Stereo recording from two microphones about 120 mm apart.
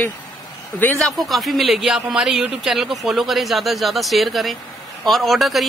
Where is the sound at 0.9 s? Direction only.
Centre (ahead or behind).